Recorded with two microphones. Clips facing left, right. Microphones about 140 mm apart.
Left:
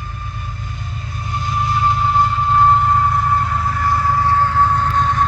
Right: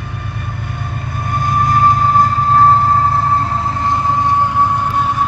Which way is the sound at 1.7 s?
40° right (ahead or behind).